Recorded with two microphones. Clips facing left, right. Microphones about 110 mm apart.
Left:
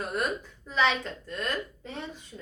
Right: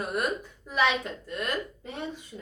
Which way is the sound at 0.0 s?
10° right (ahead or behind).